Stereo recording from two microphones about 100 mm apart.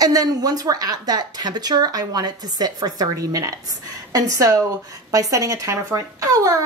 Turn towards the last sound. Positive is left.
turn(degrees=-35)  # may be behind; listen again after turning